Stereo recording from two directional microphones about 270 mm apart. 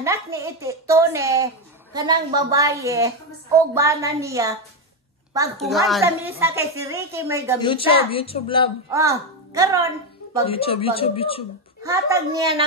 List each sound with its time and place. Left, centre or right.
0.0 s a woman's voice: centre
5.6 s a woman's voice: centre
7.6 s a woman's voice: centre
8.9 s a woman's voice: centre
10.4 s a woman's voice: left
11.8 s a woman's voice: centre